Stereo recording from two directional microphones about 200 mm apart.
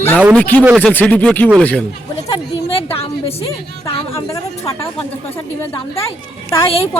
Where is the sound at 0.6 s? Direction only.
10° right (ahead or behind).